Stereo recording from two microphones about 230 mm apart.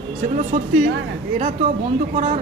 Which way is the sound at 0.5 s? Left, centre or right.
Right.